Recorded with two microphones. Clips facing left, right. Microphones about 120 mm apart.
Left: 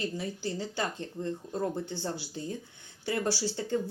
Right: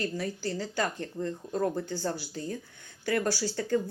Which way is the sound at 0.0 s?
20° left (ahead or behind).